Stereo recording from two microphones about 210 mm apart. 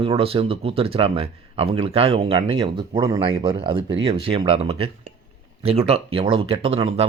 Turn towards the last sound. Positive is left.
turn(degrees=-30)  # may be behind; listen again after turning